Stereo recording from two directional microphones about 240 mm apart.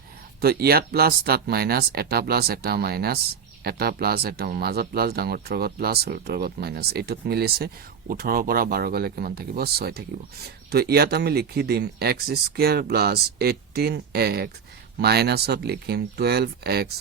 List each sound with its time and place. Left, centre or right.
0.4 s speech: right